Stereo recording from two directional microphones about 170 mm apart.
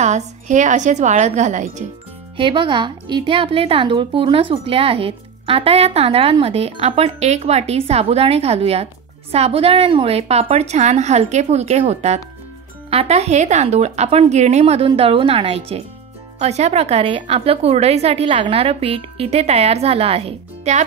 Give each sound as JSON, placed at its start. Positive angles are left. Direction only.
{"t": 0.0, "sound": "speech", "side_deg": -45}
{"t": 2.3, "sound": "speech", "side_deg": -30}